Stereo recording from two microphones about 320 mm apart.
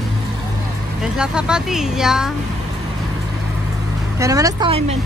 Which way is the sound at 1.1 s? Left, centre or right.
Centre.